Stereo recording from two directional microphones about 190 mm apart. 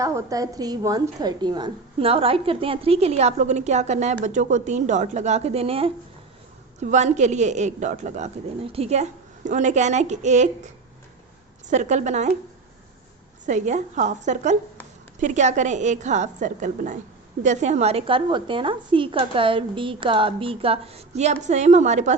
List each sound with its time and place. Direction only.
0.0 s a woman's voice: 15° right (ahead or behind); by 10.7 s 40° right (ahead or behind)
11.7 s a woman's voice: 40° right (ahead or behind)
13.4 s a woman's voice: 40° right (ahead or behind)